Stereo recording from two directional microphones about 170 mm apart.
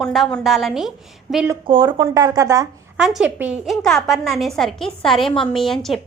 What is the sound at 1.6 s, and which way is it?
Speech, 30° right (ahead or behind).